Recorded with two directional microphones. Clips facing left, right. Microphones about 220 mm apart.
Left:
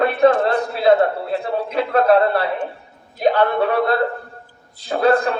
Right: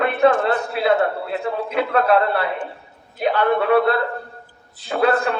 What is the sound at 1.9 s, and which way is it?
A man's voice, 40° left (ahead or behind).